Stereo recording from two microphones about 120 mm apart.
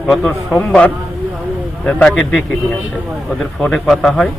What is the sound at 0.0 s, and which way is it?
A man's voice, centre (ahead or behind).